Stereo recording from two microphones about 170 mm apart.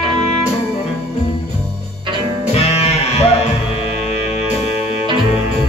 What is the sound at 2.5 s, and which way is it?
Music, 35° left (ahead or behind).